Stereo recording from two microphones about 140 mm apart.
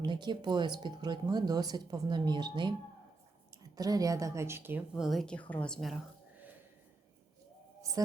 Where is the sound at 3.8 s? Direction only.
25° right (ahead or behind).